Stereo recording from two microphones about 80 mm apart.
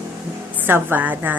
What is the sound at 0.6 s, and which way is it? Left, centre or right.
Speech, right.